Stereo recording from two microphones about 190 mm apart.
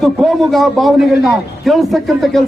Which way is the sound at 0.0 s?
Centre (ahead or behind).